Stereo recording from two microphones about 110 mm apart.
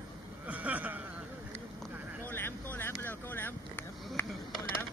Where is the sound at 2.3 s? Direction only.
20° left (ahead or behind).